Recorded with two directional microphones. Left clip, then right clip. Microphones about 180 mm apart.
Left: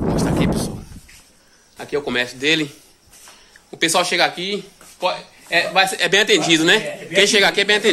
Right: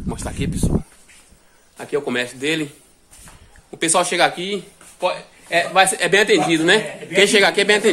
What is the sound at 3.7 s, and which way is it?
Speech, 10° right (ahead or behind).